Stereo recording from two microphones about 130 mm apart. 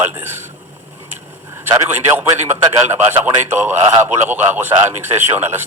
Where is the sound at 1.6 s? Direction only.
15° right (ahead or behind).